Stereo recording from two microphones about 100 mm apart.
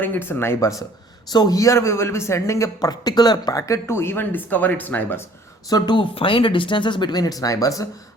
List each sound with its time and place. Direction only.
0.0 s a man's voice: 20° left (ahead or behind)
5.6 s speech: 40° left (ahead or behind)